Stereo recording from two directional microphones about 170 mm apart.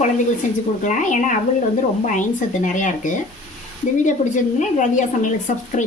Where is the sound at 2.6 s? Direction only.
50° left (ahead or behind).